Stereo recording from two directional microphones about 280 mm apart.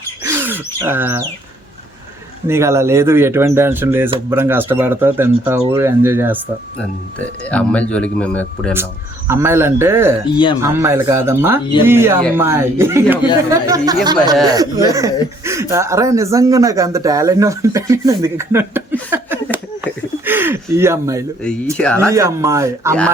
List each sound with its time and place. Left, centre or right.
0.2 s wild animals: centre
0.8 s speech: centre
2.5 s speech: centre
7.5 s speech: centre
8.7 s speech: centre
10.3 s speech: centre
10.6 s speech: centre
21.4 s speech: centre
22.1 s speech: centre